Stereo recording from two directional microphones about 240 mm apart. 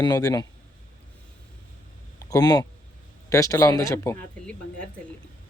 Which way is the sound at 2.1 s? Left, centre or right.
Centre.